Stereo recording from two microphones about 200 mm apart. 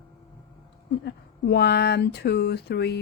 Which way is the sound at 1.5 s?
55° left (ahead or behind).